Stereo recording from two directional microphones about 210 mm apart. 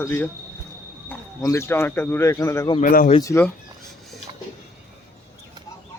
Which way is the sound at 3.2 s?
15° left (ahead or behind).